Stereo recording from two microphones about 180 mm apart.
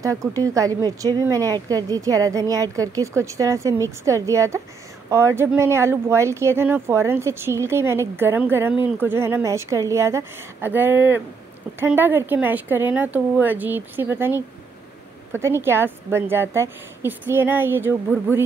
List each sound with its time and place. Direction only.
0.0 s speech: 15° right (ahead or behind)